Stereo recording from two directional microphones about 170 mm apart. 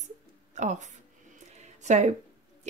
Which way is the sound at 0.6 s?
45° right (ahead or behind).